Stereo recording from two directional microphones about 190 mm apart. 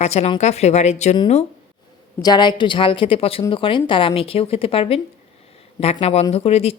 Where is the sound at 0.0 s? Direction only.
35° left (ahead or behind).